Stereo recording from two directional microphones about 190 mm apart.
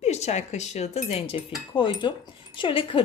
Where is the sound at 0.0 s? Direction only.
35° left (ahead or behind).